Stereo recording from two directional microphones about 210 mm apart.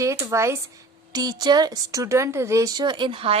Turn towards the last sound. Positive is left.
turn(degrees=-25)  # may be behind; listen again after turning